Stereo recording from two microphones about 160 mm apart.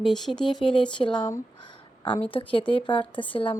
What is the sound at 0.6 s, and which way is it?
A woman's voice, 30° left (ahead or behind).